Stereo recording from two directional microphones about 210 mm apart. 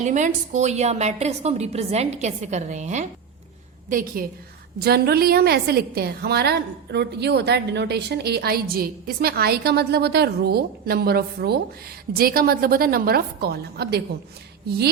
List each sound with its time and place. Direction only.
0.0 s a woman's voice: 35° right (ahead or behind)